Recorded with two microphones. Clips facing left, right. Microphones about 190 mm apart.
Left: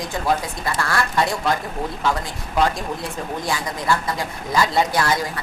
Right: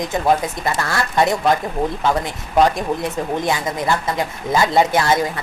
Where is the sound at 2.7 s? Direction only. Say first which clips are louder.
Right 6 dB; 20° right (ahead or behind).